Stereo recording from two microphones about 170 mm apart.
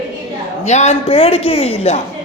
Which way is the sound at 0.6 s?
40° left (ahead or behind).